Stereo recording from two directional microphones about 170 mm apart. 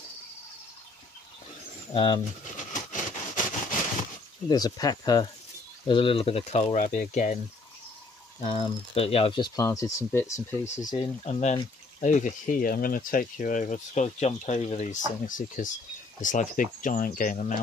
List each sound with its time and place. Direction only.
2.0 s speech: 30° left (ahead or behind)
2.5 s vehicle: 50° left (ahead or behind)
4.5 s speech: 20° left (ahead or behind); by 7.3 s 45° left (ahead or behind)
8.5 s speech: 35° left (ahead or behind); by 11.0 s 20° left (ahead or behind)
11.0 s speech: 40° left (ahead or behind)